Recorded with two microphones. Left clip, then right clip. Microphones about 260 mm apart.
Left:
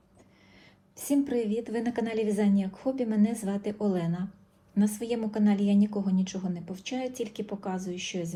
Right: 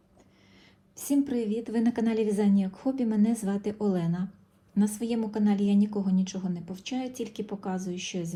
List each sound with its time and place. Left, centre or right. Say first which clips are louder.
0.9 s a woman's voice: even; centre